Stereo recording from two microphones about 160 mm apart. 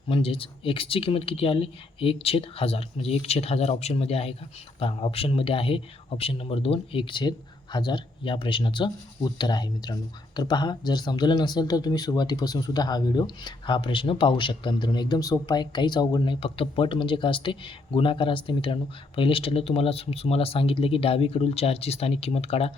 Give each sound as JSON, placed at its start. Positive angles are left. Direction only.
{"t": 0.1, "sound": "speech", "side_deg": 35}